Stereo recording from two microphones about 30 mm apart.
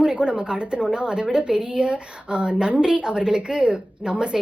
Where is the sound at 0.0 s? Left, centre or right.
Right.